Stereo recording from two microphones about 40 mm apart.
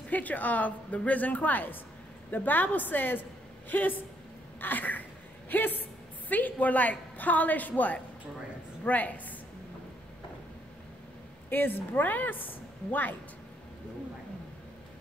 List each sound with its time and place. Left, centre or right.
0.1 s a woman's voice: left
11.5 s speech: left